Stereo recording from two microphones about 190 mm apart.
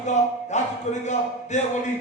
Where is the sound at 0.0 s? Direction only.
40° left (ahead or behind).